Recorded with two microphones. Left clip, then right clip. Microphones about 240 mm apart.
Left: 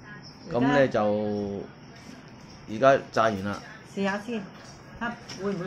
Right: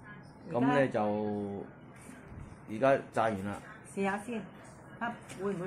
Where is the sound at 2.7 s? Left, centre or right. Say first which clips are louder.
Left 7 dB; centre.